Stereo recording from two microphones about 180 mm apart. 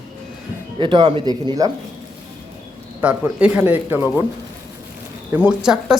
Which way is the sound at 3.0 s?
5° right (ahead or behind).